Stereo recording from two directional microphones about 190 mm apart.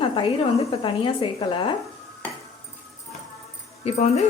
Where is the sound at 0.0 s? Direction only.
30° left (ahead or behind).